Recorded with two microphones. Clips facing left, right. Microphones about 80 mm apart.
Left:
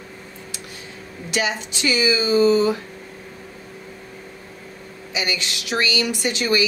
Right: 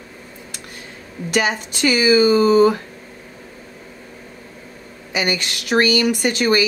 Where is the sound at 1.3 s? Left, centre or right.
Right.